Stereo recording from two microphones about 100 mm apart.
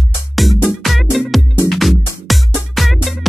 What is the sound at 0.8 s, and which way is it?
Music, centre (ahead or behind).